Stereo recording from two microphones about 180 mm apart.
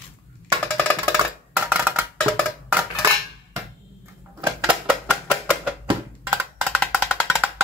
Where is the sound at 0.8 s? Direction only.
10° left (ahead or behind).